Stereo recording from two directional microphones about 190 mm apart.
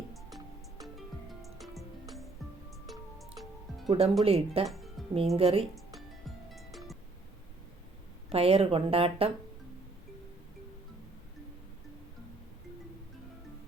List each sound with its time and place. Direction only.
0.1 s music: centre (ahead or behind)
3.8 s speech: 30° right (ahead or behind)
4.6 s music: centre (ahead or behind)
5.4 s speech: 30° right (ahead or behind)
5.7 s music: centre (ahead or behind)
8.3 s speech: 30° right (ahead or behind)